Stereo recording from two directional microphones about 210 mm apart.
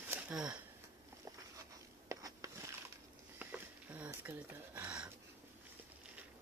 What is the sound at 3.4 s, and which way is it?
Sniff, 10° right (ahead or behind).